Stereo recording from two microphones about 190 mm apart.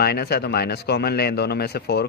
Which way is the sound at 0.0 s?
55° left (ahead or behind).